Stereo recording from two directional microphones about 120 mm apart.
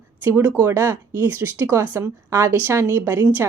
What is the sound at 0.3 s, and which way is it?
A woman's voice, 20° right (ahead or behind).